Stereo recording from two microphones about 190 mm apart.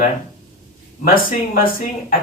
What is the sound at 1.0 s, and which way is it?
Speech, 50° left (ahead or behind).